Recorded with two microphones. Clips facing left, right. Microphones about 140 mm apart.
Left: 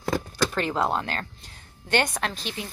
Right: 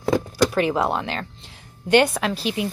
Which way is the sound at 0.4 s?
10° right (ahead or behind).